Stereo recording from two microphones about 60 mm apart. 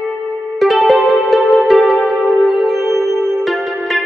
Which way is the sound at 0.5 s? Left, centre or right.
Centre.